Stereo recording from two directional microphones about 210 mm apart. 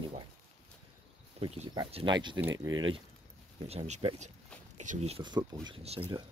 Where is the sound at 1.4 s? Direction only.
30° right (ahead or behind).